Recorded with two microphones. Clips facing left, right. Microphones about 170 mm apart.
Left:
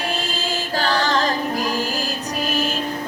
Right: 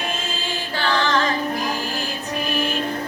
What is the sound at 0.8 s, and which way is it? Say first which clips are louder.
Music: even; 40° left (ahead or behind).